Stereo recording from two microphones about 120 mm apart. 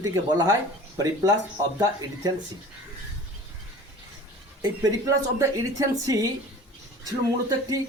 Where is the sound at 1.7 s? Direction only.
30° right (ahead or behind).